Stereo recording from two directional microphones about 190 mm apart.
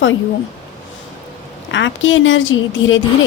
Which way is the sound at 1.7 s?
80° left.